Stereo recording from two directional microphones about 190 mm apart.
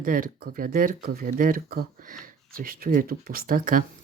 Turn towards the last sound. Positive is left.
turn(degrees=-45)  # may be behind; listen again after turning